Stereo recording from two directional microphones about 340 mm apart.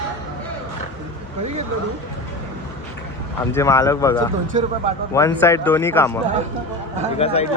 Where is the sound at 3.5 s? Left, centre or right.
Centre.